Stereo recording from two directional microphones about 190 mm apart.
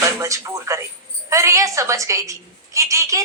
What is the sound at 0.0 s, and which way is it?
A woman's voice, 15° right (ahead or behind).